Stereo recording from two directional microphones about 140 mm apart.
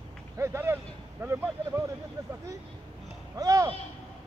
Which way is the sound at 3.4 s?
25° right (ahead or behind).